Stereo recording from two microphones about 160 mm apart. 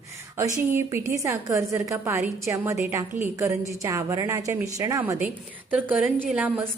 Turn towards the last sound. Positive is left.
turn(degrees=-10)  # may be behind; listen again after turning